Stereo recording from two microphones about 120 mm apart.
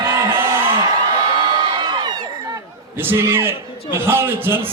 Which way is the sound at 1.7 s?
40° right (ahead or behind).